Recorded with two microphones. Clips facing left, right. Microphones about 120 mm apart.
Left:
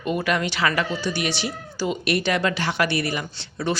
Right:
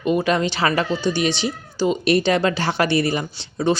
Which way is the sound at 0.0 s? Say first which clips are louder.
Right 5 dB; 20° right (ahead or behind).